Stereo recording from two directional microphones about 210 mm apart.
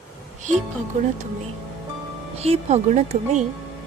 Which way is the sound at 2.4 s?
30° right (ahead or behind).